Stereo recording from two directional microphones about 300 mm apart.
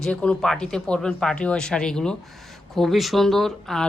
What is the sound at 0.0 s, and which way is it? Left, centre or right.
Speech, centre.